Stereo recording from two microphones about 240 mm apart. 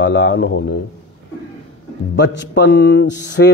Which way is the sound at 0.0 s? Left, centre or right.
Left.